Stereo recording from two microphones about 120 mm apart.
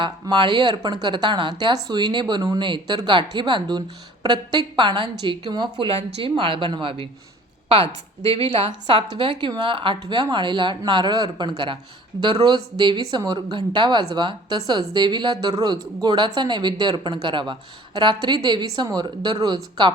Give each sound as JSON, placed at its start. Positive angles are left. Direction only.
{"t": 0.0, "sound": "a woman's voice", "side_deg": -40}